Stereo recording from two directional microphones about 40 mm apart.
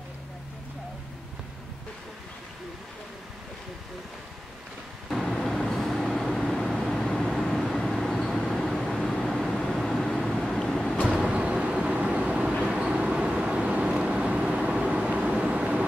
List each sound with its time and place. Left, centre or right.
5.3 s vehicle: centre
11.2 s vehicle: right